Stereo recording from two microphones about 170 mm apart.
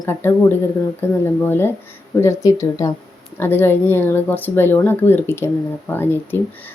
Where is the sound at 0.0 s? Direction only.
15° left (ahead or behind).